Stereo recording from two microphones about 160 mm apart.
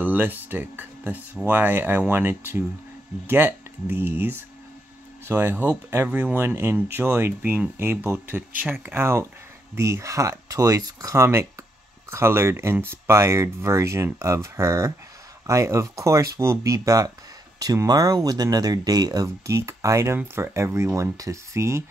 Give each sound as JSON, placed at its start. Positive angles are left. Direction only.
{"t": 0.0, "sound": "speech", "side_deg": -10}
{"t": 5.3, "sound": "speech", "side_deg": -10}